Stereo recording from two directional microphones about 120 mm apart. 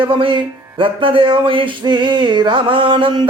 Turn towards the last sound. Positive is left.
turn(degrees=-45)  # may be behind; listen again after turning